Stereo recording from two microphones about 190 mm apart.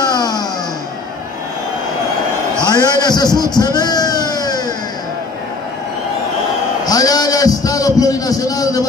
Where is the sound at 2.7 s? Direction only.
20° left (ahead or behind).